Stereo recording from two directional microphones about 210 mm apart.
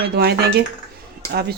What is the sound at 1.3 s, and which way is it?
Speech, 50° right (ahead or behind).